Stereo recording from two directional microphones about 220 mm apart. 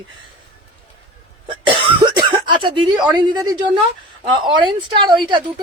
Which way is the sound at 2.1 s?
20° right (ahead or behind).